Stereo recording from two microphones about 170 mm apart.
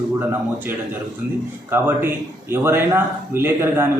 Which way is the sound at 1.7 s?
15° right (ahead or behind).